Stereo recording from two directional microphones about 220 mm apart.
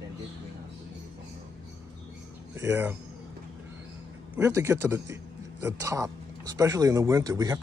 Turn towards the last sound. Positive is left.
turn(degrees=-15)  # may be behind; listen again after turning